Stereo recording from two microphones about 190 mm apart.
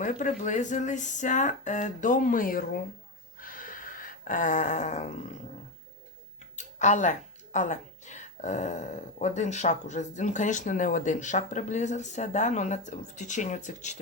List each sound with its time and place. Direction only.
0.0 s speech: 40° left (ahead or behind)
3.3 s a sound: 45° left (ahead or behind)
6.7 s speech: 40° left (ahead or behind)